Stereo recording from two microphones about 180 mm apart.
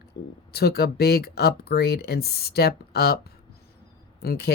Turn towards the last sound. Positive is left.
turn(degrees=65)  # may be behind; listen again after turning